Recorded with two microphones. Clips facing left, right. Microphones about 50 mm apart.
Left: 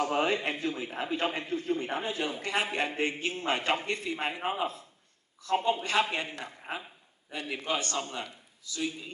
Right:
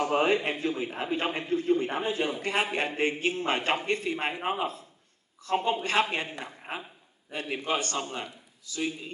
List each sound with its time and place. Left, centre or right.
0.0 s a man's voice: centre